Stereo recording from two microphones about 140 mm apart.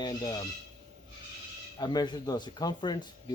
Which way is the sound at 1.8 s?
30° left (ahead or behind).